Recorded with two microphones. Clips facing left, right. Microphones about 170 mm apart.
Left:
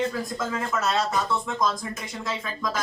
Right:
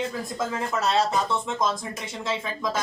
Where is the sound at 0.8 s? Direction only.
30° right (ahead or behind).